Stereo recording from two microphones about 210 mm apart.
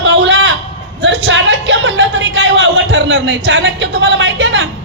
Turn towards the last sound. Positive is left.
turn(degrees=-60)  # may be behind; listen again after turning